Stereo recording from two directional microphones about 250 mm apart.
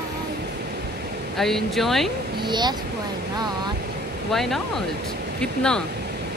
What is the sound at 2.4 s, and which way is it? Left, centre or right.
Speech, centre.